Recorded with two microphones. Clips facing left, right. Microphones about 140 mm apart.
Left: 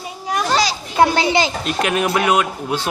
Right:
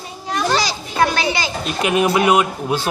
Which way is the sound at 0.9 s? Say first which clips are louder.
Left 4 dB; 20° left (ahead or behind).